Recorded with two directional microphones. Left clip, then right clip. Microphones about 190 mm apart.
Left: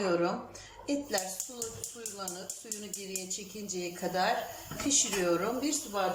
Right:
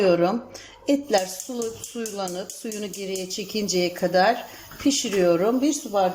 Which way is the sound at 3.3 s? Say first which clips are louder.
Right 13 dB; 45° right (ahead or behind).